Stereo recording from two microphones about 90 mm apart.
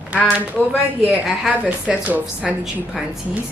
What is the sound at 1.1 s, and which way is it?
A woman's voice, 15° right (ahead or behind).